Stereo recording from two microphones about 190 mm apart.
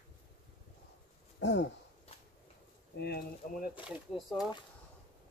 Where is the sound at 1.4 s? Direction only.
70° left (ahead or behind).